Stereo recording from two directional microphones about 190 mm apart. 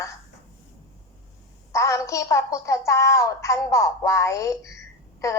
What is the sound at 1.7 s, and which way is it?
A woman's voice, 15° left (ahead or behind).